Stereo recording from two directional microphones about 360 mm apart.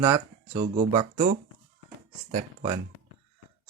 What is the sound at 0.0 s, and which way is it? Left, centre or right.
Speech, centre.